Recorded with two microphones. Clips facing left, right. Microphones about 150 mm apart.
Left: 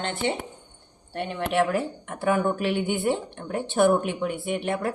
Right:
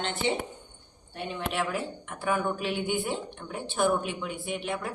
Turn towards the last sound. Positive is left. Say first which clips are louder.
# left 6 dB
turn(degrees=60)  # may be behind; listen again after turning